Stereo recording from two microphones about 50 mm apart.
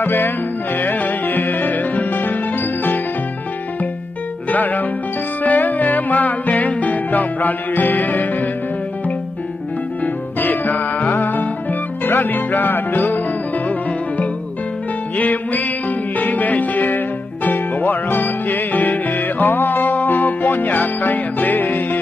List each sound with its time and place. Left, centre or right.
0.0 s music: left
4.5 s music: left
10.4 s music: left
15.1 s music: left